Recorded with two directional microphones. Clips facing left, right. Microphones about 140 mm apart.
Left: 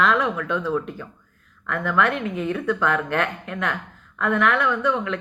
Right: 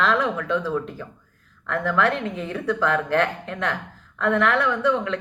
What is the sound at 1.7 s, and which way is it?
A woman's voice, 35° right (ahead or behind).